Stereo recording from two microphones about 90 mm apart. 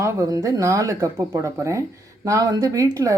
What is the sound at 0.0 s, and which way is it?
A woman's voice, 35° right (ahead or behind).